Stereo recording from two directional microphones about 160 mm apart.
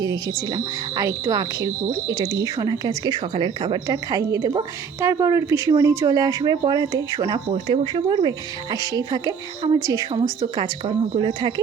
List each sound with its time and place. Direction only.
0.5 s a woman's voice: 20° right (ahead or behind)
7.5 s a woman's voice: 35° right (ahead or behind)